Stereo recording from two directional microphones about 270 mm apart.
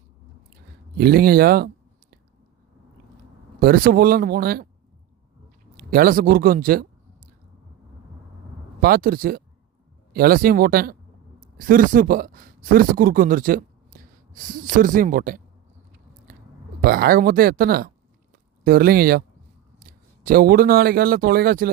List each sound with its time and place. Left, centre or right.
0.9 s speech: right
3.6 s speech: right
5.7 s speech: right
8.8 s speech: right
16.8 s speech: right